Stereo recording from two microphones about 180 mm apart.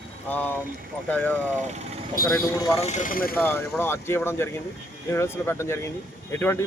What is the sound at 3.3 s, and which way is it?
A man's voice, 10° left (ahead or behind).